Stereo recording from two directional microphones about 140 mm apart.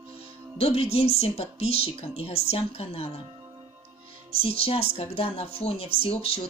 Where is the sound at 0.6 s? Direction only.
45° left (ahead or behind).